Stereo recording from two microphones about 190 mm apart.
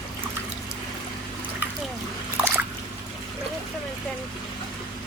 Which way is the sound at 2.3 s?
10° right (ahead or behind).